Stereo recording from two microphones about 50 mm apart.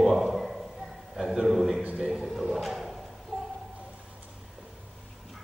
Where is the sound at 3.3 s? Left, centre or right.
Centre.